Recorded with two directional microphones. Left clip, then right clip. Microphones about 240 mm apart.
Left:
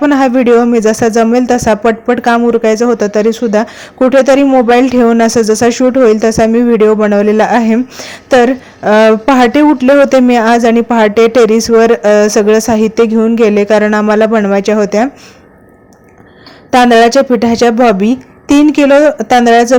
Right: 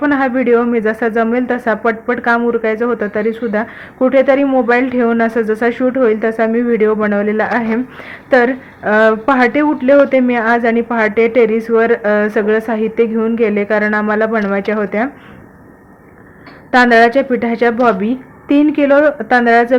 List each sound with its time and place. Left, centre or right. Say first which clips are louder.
0.0 s speech: left 5 dB; left
16.7 s speech: left 3 dB; left